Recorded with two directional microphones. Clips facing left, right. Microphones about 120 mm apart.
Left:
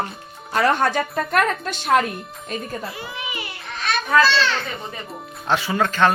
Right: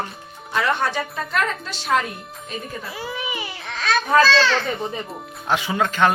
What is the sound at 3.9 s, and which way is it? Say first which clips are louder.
Children playing: right 3 dB; 90° right.